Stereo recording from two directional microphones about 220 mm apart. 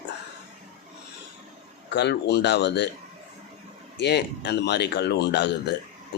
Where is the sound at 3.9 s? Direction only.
50° left (ahead or behind).